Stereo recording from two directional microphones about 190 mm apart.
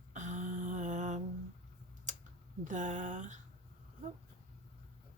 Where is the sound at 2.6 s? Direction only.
40° right (ahead or behind).